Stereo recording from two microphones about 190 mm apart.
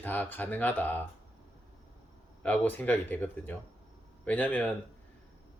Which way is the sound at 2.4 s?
10° left (ahead or behind).